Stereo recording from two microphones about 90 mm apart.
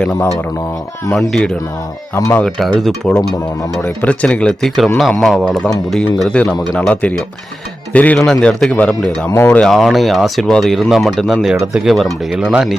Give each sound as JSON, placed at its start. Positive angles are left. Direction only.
{"t": 0.1, "sound": "speech", "side_deg": 35}
{"t": 1.3, "sound": "speech", "side_deg": 10}
{"t": 2.1, "sound": "speech", "side_deg": 30}
{"t": 2.4, "sound": "speech", "side_deg": 5}
{"t": 6.2, "sound": "speech", "side_deg": 15}
{"t": 9.7, "sound": "speech", "side_deg": 0}